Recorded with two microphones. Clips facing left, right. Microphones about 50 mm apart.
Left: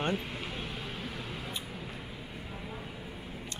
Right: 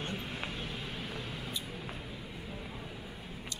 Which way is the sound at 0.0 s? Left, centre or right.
Left.